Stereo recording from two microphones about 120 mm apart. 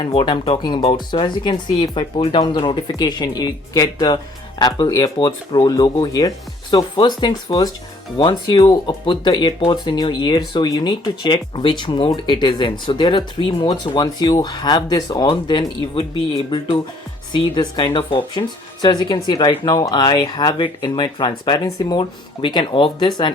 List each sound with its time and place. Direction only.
0.0 s speech: 50° left (ahead or behind)
0.9 s speech: 40° left (ahead or behind)
8.5 s speech: 30° left (ahead or behind)
17.3 s speech: 40° left (ahead or behind)